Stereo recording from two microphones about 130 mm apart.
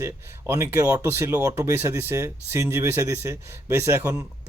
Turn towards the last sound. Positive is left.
turn(degrees=-20)  # may be behind; listen again after turning